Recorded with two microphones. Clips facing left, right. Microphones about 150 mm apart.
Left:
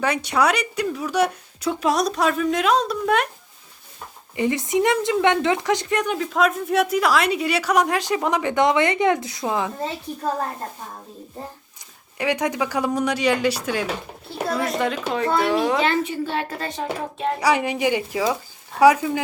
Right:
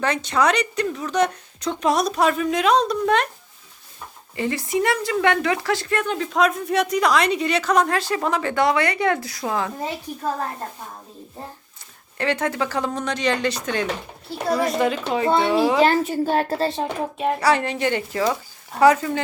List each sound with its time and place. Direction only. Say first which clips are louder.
0.0 s a woman's voice: even; 10° left (ahead or behind)
4.4 s speech: left 2 dB; 20° left (ahead or behind)
6.1 s a woman's voice: even; centre (ahead or behind); by 9.7 s 15° left (ahead or behind)
12.1 s a woman's voice: even; 10° left (ahead or behind)
15.8 s a woman's voice: right 4 dB; 40° right (ahead or behind)
16.6 s speech: right 3 dB; 25° right (ahead or behind)
17.4 s a woman's voice: left 1 dB; 10° left (ahead or behind)